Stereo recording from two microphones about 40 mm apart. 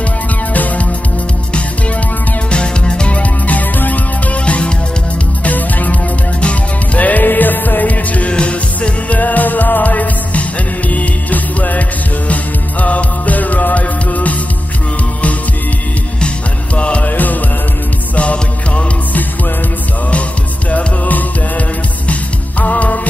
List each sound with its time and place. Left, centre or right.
2.5 s music: left
3.2 s music: left
4.5 s music: left
5.4 s music: left
8.3 s music: left
9.2 s music: left
12.8 s music: left
16.7 s music: left
18.1 s music: left
20.7 s music: left